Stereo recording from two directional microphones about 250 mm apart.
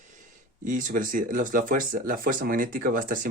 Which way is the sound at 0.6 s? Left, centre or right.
Right.